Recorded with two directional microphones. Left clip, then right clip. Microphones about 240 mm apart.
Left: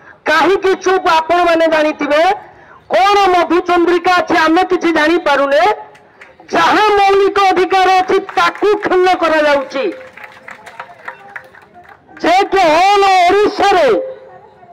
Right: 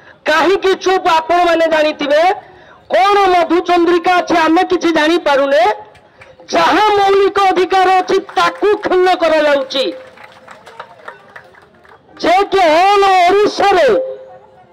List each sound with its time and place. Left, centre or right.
0.2 s a man's voice: right
12.2 s a man's voice: right